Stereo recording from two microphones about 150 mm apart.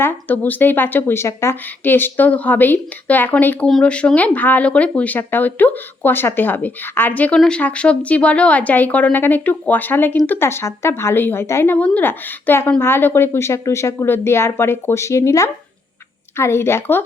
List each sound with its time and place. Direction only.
0.0 s speech: 15° left (ahead or behind)